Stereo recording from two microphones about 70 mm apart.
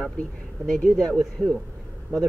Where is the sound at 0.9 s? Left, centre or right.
Centre.